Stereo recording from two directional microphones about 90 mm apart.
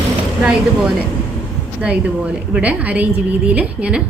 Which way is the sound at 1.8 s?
15° right (ahead or behind).